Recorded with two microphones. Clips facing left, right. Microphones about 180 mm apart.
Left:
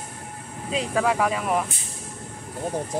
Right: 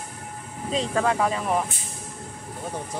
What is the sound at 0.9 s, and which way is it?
Speech, 5° left (ahead or behind).